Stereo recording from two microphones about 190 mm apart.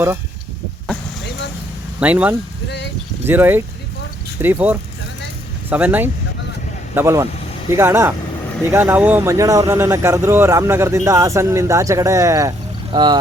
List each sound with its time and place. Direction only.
2.0 s speech: 10° right (ahead or behind)
2.6 s a sound: 65° left (ahead or behind)
3.2 s speech: 10° right (ahead or behind)